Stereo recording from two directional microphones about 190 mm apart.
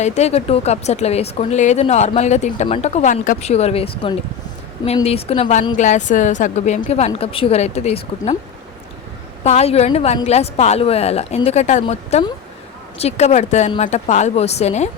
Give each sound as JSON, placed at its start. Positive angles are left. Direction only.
{"t": 0.0, "sound": "speech", "side_deg": 35}
{"t": 9.4, "sound": "speech", "side_deg": 35}